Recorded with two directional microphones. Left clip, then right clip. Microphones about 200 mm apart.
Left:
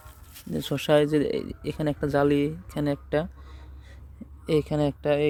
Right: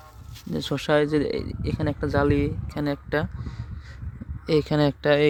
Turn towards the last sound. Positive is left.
turn(degrees=-20)  # may be behind; listen again after turning